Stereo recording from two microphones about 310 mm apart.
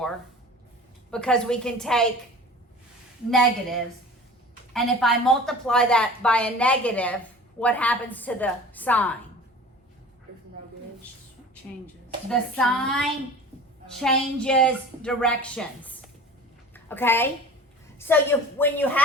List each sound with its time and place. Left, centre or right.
1.1 s speech: centre
3.2 s speech: centre
12.3 s a woman's voice: centre